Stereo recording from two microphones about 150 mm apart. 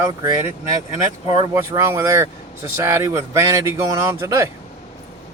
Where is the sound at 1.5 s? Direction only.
20° right (ahead or behind).